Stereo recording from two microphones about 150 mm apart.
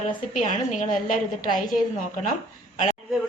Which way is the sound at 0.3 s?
55° left (ahead or behind).